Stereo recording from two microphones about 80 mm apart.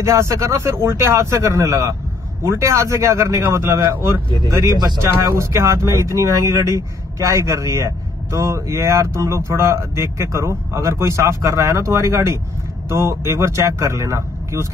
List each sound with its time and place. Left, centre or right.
0.0 s speech: right